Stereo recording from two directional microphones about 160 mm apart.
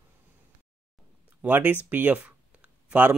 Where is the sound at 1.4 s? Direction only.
10° right (ahead or behind).